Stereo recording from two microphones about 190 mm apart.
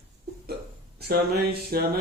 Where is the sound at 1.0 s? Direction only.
55° right (ahead or behind).